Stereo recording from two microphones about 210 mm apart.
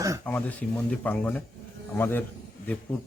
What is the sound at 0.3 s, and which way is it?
Speech, 10° left (ahead or behind).